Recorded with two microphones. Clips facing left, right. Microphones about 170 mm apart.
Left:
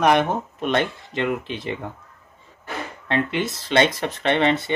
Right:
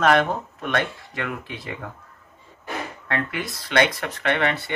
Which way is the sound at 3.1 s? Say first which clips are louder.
Left 5 dB; 25° left (ahead or behind).